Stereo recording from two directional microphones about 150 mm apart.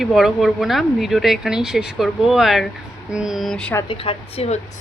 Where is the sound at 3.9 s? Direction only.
40° left (ahead or behind).